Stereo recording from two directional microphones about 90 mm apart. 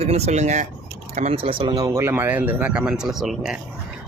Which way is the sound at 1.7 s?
40° right (ahead or behind).